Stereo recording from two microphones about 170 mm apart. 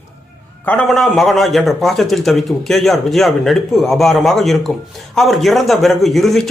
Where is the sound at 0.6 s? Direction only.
5° left (ahead or behind).